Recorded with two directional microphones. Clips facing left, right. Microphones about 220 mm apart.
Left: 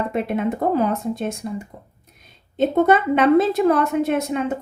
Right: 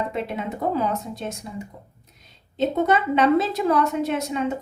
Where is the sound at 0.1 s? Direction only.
55° left (ahead or behind).